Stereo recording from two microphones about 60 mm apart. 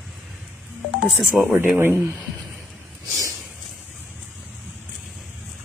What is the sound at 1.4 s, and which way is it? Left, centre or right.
Speech, centre.